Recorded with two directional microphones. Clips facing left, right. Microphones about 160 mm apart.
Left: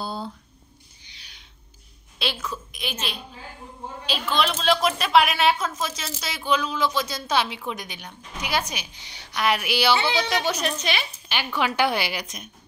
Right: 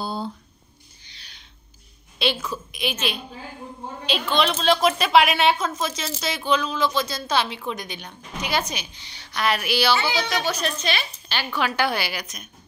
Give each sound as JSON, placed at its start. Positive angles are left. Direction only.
{"t": 0.0, "sound": "squish", "side_deg": 0}
{"t": 1.0, "sound": "owl", "side_deg": 15}
{"t": 2.1, "sound": "a woman's voice", "side_deg": 0}